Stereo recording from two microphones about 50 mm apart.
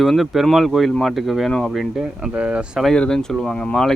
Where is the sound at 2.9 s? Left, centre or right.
Centre.